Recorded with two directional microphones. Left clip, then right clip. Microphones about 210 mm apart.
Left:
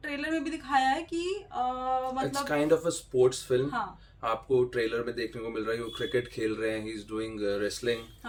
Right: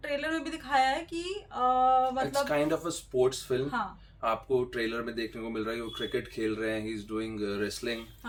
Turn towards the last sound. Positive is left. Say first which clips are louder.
# left 4 dB
turn(degrees=10)  # may be behind; listen again after turning